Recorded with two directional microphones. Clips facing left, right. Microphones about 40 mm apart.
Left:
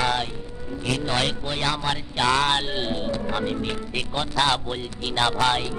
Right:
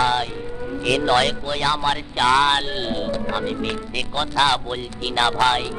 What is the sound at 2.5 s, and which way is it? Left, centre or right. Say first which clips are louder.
Speech: right 2 dB; centre.